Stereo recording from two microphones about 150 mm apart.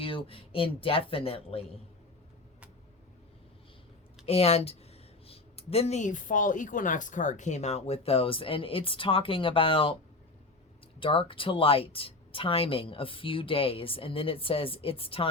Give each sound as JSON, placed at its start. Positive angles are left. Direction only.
{"t": 0.0, "sound": "a woman's voice", "side_deg": 35}
{"t": 4.3, "sound": "speech", "side_deg": 45}
{"t": 11.0, "sound": "a woman's voice", "side_deg": 35}